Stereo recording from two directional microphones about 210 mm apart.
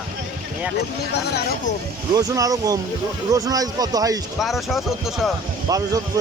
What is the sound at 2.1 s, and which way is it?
Speech, 15° right (ahead or behind).